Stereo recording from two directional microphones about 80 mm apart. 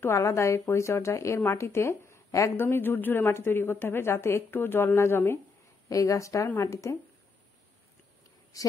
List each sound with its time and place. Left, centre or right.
0.0 s speech: left
2.5 s speech: left
5.9 s a woman's voice: left
8.5 s a woman's voice: left